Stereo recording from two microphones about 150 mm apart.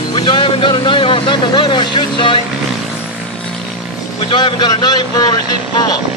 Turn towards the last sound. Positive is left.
turn(degrees=25)  # may be behind; listen again after turning